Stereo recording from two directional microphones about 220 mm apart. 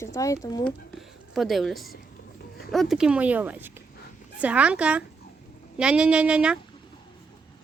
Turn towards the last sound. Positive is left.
turn(degrees=-5)  # may be behind; listen again after turning